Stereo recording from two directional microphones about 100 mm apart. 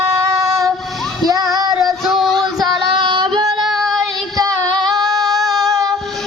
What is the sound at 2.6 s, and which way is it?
Female singing, 50° right (ahead or behind).